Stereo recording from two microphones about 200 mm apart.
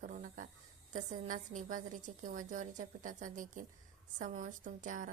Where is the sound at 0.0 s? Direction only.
40° right (ahead or behind).